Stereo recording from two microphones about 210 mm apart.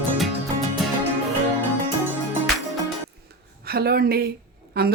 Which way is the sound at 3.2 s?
45° right (ahead or behind).